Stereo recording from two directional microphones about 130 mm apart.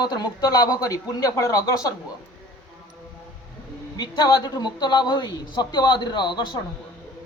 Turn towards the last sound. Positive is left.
turn(degrees=35)  # may be behind; listen again after turning